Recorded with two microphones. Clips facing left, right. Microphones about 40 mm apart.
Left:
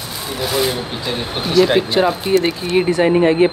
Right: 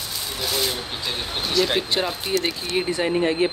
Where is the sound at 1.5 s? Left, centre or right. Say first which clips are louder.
Left 9 dB; centre.